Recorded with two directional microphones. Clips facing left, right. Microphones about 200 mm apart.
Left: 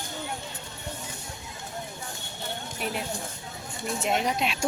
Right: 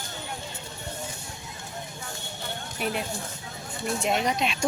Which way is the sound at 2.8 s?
Centre (ahead or behind).